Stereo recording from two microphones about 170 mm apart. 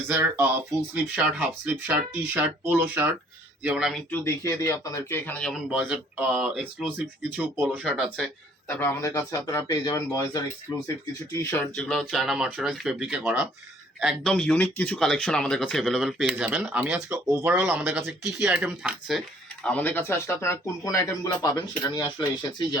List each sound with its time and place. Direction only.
0.1 s speech: 10° right (ahead or behind)
4.1 s speech: 15° left (ahead or behind); by 7.8 s 10° right (ahead or behind)
7.9 s speech: centre (ahead or behind)
19.6 s speech: 10° left (ahead or behind); by 22.8 s 25° left (ahead or behind)